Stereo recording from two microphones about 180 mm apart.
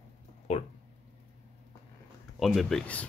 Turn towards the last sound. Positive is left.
turn(degrees=5)  # may be behind; listen again after turning